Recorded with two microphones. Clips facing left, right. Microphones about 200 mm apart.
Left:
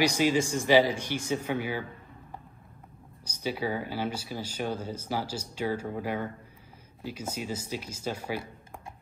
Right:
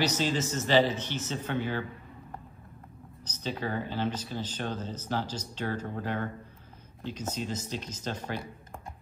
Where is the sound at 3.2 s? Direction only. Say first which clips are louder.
Left 3 dB; 10° left (ahead or behind).